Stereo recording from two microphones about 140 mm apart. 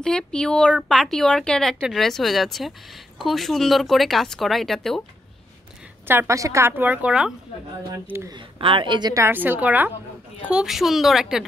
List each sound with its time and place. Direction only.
0.0 s speech: 5° left (ahead or behind)
6.0 s a woman's voice: 20° right (ahead or behind)
7.9 s a woman's voice: 20° right (ahead or behind)
8.3 s a woman's voice: 40° right (ahead or behind)
9.1 s a woman's voice: 15° right (ahead or behind)